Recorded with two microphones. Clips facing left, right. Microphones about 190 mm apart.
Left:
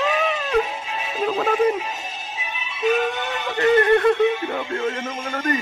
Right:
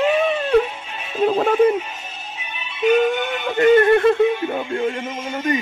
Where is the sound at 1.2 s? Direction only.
35° right (ahead or behind).